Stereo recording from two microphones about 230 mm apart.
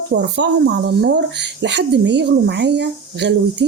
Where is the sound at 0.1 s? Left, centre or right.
Right.